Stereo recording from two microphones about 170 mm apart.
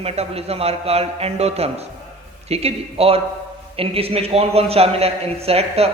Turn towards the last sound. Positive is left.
turn(degrees=-35)  # may be behind; listen again after turning